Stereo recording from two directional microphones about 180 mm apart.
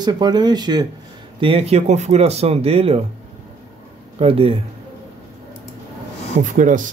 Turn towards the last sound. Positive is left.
turn(degrees=-45)  # may be behind; listen again after turning